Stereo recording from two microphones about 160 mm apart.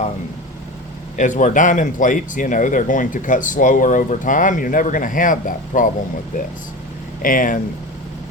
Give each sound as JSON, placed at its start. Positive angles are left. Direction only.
{"t": 1.1, "sound": "speech", "side_deg": 50}
{"t": 7.2, "sound": "speech", "side_deg": 60}